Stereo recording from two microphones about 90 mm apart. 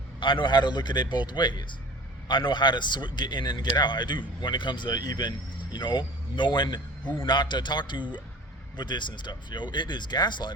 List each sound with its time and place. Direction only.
0.2 s a man's voice: 65° left (ahead or behind); by 5.3 s 45° left (ahead or behind)
5.7 s a man's voice: 60° left (ahead or behind)